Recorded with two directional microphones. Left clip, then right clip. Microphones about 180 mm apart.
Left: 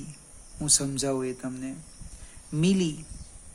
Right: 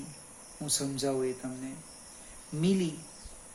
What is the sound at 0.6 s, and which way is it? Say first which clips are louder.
Speech: left 6 dB; 55° left (ahead or behind).